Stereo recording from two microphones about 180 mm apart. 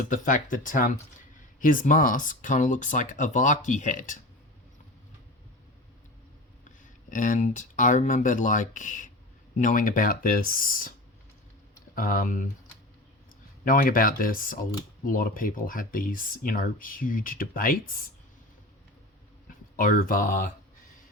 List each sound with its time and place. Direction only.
0.0 s speech: 45° left (ahead or behind)
6.7 s speech: 45° left (ahead or behind)
11.9 s speech: 50° left (ahead or behind)
13.7 s speech: 50° left (ahead or behind)
19.7 s speech: 50° left (ahead or behind)